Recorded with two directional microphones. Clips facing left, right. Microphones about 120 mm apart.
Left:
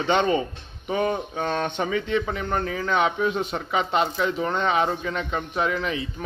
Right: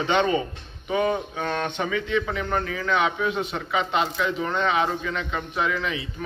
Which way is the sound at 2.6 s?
30° left (ahead or behind).